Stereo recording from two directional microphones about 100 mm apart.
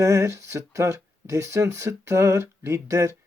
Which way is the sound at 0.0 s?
35° right (ahead or behind).